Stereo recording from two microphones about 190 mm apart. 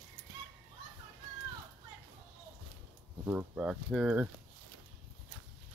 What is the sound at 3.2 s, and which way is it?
Speech, 5° right (ahead or behind).